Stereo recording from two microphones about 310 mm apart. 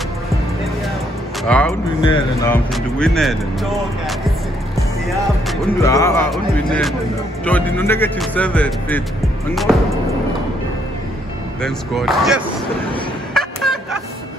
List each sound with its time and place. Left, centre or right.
1.4 s speech: centre
5.8 s music: centre
6.3 s speech: centre
11.6 s speech: centre
13.3 s a sound: centre